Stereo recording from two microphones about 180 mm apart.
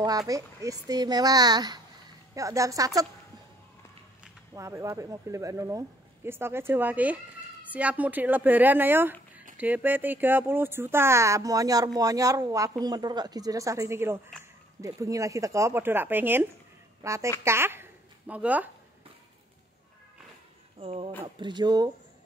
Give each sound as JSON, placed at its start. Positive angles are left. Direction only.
{"t": 0.3, "sound": "a woman's voice", "side_deg": -20}
{"t": 4.6, "sound": "a woman's voice", "side_deg": -15}
{"t": 20.8, "sound": "a woman's voice", "side_deg": -30}